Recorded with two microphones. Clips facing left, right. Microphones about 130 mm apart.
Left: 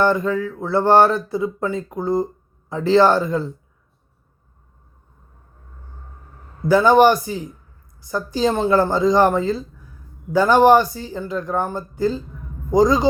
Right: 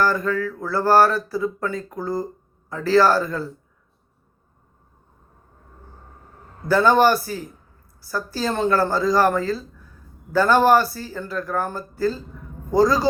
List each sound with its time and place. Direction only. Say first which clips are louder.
0.0 s speech: left 3 dB; 20° left (ahead or behind)
6.7 s speech: left 3 dB; 15° left (ahead or behind)